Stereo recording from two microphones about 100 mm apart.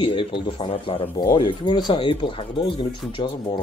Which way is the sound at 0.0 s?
60° left (ahead or behind).